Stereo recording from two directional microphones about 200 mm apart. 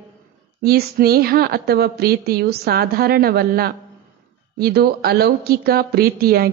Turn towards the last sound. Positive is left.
turn(degrees=-50)  # may be behind; listen again after turning